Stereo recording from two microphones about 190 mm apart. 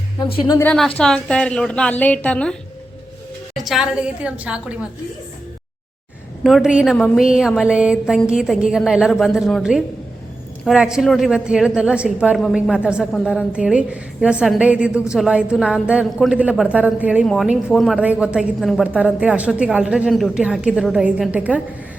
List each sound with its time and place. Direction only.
0.2 s a woman's voice: 25° left (ahead or behind)
0.7 s a woman's voice: 5° left (ahead or behind)
6.4 s a woman's voice: centre (ahead or behind)